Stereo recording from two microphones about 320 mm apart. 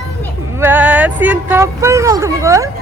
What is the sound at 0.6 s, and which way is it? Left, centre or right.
Speech, centre.